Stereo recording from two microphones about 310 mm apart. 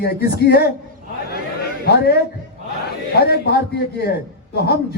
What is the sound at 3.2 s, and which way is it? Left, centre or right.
Speech, left.